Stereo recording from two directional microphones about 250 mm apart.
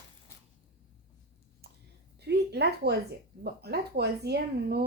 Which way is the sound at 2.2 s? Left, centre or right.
Right.